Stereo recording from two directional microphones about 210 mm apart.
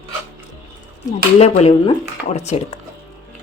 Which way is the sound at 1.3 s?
30° left (ahead or behind).